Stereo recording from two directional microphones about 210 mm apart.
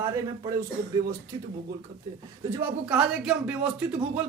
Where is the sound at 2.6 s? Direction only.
5° right (ahead or behind).